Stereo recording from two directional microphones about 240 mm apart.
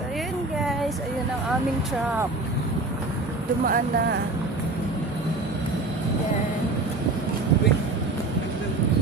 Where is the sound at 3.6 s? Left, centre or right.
Right.